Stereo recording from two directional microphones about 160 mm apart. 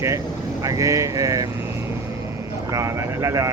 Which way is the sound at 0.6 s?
20° right (ahead or behind).